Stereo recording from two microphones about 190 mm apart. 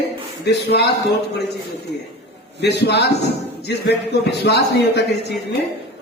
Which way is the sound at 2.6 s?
60° left (ahead or behind).